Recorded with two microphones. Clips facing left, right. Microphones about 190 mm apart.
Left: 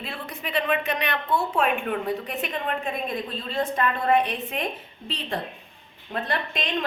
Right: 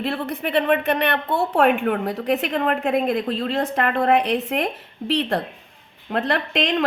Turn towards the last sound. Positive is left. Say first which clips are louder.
# right 6 dB
turn(degrees=-75)  # may be behind; listen again after turning